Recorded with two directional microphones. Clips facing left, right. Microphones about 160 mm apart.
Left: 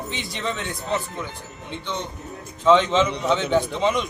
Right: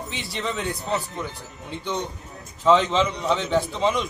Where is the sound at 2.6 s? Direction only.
Centre (ahead or behind).